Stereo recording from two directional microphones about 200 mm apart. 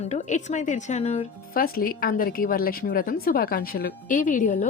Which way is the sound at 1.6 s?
45° left (ahead or behind).